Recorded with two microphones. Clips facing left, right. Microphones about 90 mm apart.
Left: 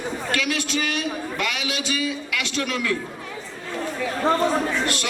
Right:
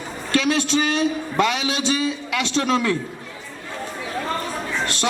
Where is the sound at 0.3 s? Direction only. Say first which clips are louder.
Right 7 dB; 30° right (ahead or behind).